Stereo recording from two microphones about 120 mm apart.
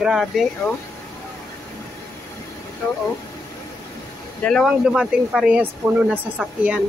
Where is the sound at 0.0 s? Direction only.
Centre (ahead or behind).